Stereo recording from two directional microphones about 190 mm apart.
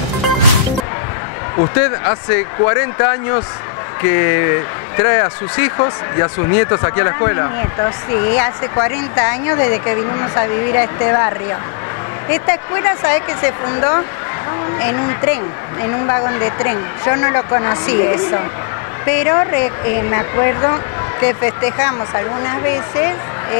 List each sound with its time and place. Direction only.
1.8 s speech: 20° left (ahead or behind)